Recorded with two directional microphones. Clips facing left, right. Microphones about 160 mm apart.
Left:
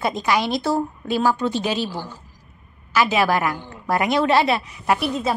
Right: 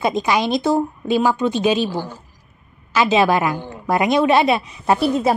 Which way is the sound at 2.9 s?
20° right (ahead or behind).